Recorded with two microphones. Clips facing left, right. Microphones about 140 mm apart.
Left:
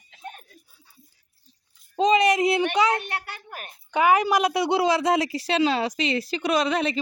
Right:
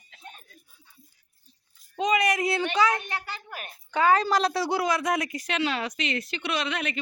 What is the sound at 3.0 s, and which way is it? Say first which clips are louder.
Speech: left 2 dB; 65° left (ahead or behind).